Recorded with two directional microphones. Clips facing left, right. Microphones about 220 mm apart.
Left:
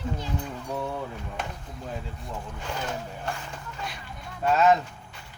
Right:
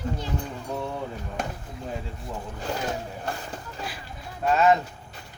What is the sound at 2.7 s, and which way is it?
Speech, 35° right (ahead or behind).